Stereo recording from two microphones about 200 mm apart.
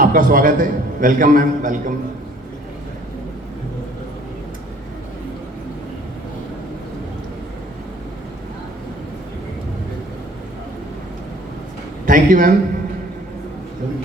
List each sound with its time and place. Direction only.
0.0 s a man's voice: 45° right (ahead or behind)
12.0 s a man's voice: 45° right (ahead or behind)